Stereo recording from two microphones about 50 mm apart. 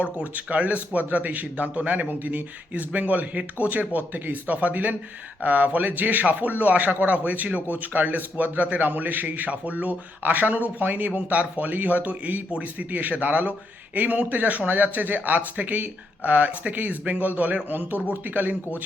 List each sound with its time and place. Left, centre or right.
0.0 s a man's voice: right